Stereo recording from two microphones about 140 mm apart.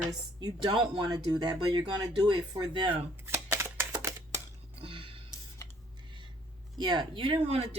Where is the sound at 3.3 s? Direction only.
15° right (ahead or behind).